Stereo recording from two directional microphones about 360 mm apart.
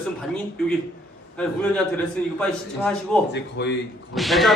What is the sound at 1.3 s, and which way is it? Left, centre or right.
A man's voice, centre.